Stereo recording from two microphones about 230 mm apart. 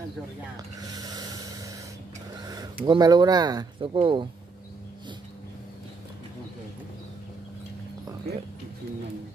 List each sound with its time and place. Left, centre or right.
0.7 s rub: centre
2.4 s speech: centre